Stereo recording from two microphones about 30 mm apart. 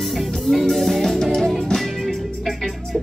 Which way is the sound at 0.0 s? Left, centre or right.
Centre.